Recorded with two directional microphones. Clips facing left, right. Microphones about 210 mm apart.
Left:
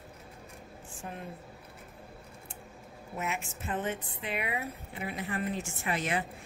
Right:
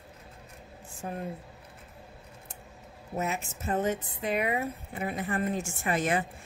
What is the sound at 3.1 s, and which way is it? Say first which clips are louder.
Speech: right 4 dB; 40° right (ahead or behind).